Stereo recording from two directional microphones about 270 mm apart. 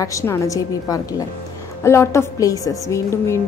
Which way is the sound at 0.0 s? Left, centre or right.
Centre.